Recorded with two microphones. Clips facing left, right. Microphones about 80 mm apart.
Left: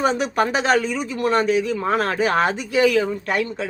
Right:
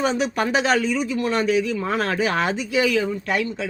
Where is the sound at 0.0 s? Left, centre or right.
Left.